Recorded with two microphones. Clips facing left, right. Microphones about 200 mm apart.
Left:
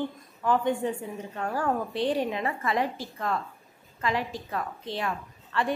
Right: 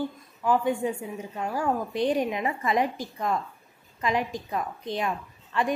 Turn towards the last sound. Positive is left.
turn(degrees=-15)  # may be behind; listen again after turning